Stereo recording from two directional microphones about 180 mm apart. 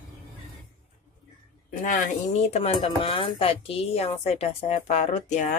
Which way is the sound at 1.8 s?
45° left (ahead or behind).